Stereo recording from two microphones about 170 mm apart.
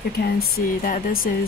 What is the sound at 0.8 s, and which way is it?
Speech, 55° left (ahead or behind).